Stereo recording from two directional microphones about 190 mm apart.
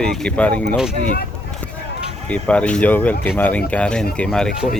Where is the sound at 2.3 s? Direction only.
5° left (ahead or behind).